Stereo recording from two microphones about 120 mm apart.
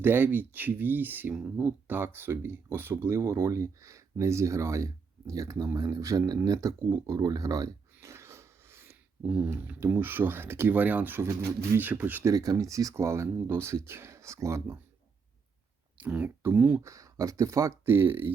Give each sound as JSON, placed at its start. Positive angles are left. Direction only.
{"t": 0.0, "sound": "speech", "side_deg": -20}
{"t": 12.3, "sound": "speech", "side_deg": -30}
{"t": 16.0, "sound": "speech", "side_deg": -10}
{"t": 16.8, "sound": "speech", "side_deg": -25}